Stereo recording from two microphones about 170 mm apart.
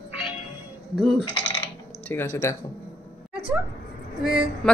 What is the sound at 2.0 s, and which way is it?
Speech, 15° left (ahead or behind).